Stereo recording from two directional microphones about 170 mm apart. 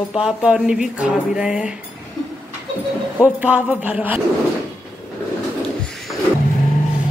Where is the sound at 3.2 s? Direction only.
10° right (ahead or behind).